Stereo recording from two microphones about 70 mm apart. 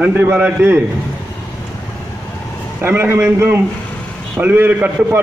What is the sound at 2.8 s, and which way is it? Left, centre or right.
A man's voice, right.